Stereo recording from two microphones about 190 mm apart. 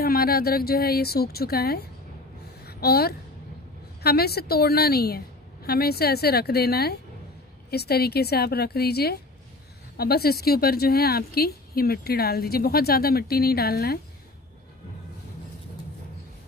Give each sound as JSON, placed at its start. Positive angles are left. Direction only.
{"t": 0.0, "sound": "a woman's voice", "side_deg": 55}